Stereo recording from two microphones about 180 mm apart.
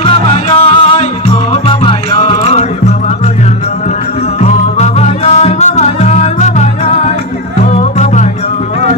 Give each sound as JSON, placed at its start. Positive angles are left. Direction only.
{"t": 0.0, "sound": "music", "side_deg": 30}
{"t": 4.4, "sound": "music", "side_deg": 35}